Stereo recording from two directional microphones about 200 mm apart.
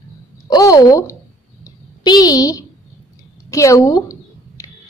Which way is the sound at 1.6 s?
20° left (ahead or behind).